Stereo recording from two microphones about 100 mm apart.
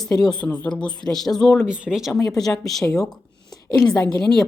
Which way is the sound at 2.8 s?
30° left (ahead or behind).